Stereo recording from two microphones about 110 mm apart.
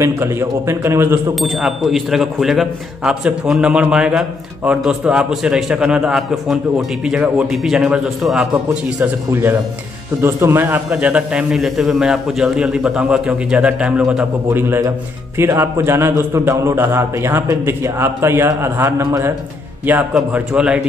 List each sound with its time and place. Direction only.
0.0 s a man's voice: 25° right (ahead or behind)
1.4 s speech: centre (ahead or behind)
9.3 s a man's voice: 20° right (ahead or behind)
10.9 s a man's voice: 10° right (ahead or behind)
14.5 s a man's voice: 20° right (ahead or behind)
19.9 s a man's voice: 15° right (ahead or behind)